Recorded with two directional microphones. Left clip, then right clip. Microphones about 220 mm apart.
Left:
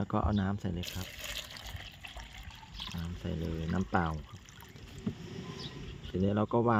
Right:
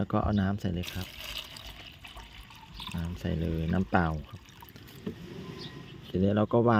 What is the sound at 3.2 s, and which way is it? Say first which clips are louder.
Speech: right 5 dB; 20° right (ahead or behind).